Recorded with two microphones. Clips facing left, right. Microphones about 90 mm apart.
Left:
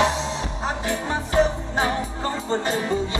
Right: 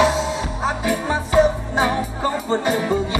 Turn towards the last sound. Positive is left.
turn(degrees=-15)  # may be behind; listen again after turning